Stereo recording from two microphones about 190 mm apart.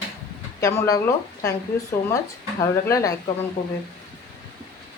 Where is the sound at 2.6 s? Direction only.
15° left (ahead or behind).